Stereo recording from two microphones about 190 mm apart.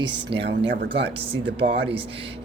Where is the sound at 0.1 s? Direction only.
60° right (ahead or behind).